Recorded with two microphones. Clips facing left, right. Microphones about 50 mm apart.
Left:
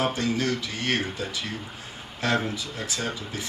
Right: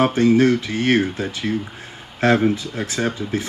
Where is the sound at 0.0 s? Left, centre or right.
Right.